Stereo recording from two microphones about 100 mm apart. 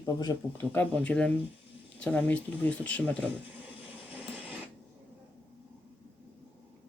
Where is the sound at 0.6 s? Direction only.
20° left (ahead or behind).